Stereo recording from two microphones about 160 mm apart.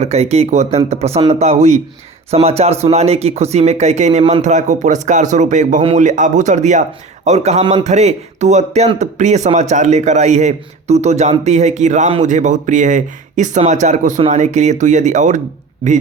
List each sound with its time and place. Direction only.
0.0 s speech: 40° right (ahead or behind)